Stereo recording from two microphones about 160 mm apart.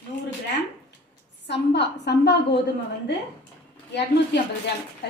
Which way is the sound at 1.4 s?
90° left.